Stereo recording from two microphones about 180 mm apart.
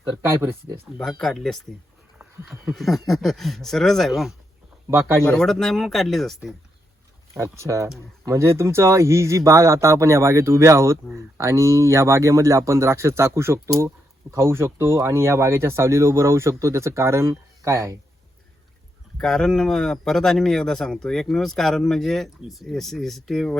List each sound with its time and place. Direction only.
0.9 s a man's voice: 5° left (ahead or behind)
4.9 s speech: 15° right (ahead or behind)
5.3 s a man's voice: centre (ahead or behind)
7.3 s speech: 15° right (ahead or behind)
19.1 s a man's voice: 5° left (ahead or behind)